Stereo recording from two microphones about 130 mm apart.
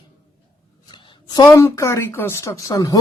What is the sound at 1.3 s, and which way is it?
Speech, 30° left (ahead or behind).